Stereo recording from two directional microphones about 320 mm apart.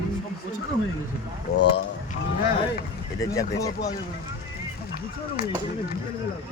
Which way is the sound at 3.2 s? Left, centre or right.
Centre.